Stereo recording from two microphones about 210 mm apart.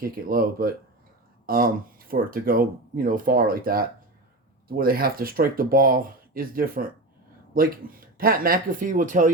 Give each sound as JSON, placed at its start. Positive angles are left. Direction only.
{"t": 0.0, "sound": "speech", "side_deg": -45}